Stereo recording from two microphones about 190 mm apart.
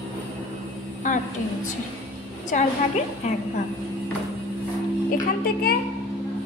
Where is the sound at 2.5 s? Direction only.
40° left (ahead or behind).